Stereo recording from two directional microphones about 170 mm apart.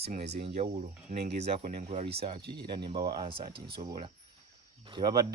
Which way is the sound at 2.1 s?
35° right (ahead or behind).